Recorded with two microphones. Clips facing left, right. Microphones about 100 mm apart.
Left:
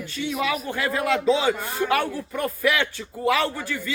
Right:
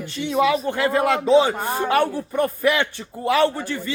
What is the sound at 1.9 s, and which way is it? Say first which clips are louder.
A man's voice: right 6 dB; 30° right (ahead or behind).